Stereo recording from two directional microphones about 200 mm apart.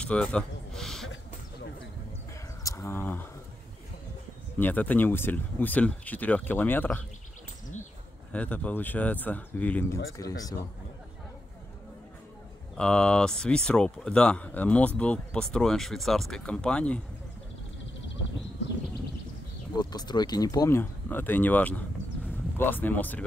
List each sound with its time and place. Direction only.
0.0 s a sound: 5° left (ahead or behind)
2.6 s speech: 15° left (ahead or behind)
4.6 s speech: 10° left (ahead or behind)
8.3 s speech: 5° left (ahead or behind)
12.7 s speech: 5° left (ahead or behind)
19.8 s speech: 20° left (ahead or behind)